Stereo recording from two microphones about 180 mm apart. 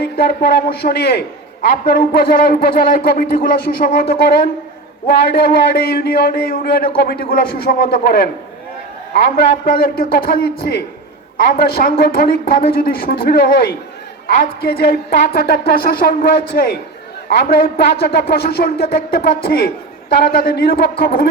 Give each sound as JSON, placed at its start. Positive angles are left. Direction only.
{"t": 0.0, "sound": "a man's voice", "side_deg": 60}
{"t": 1.6, "sound": "a man's voice", "side_deg": 50}